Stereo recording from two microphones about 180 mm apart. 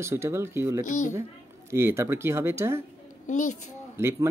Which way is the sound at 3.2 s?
45° left (ahead or behind).